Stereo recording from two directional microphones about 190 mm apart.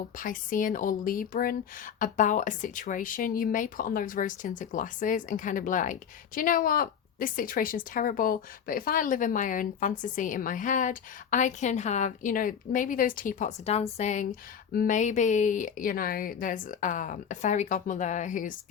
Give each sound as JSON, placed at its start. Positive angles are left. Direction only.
{"t": 0.2, "sound": "a woman's voice", "side_deg": 45}